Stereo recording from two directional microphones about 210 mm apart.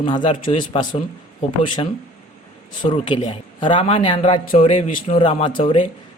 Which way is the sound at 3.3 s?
25° left (ahead or behind).